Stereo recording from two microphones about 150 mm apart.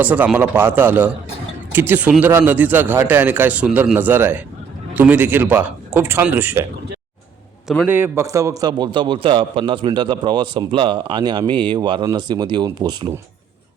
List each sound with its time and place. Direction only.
0.0 s a man's voice: 10° right (ahead or behind)
7.9 s a man's voice: 15° right (ahead or behind)